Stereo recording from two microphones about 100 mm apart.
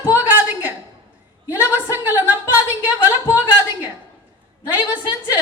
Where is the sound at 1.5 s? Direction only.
20° right (ahead or behind).